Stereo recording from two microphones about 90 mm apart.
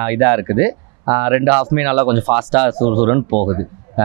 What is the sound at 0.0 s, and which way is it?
Speech, 25° right (ahead or behind).